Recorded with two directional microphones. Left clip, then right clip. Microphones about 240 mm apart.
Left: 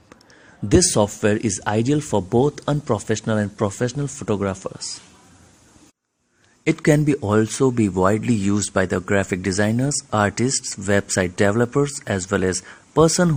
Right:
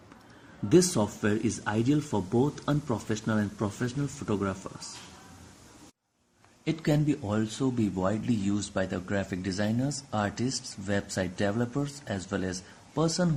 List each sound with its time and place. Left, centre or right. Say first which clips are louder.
0.7 s speech: left 7 dB; left
6.7 s speech: left 11 dB; left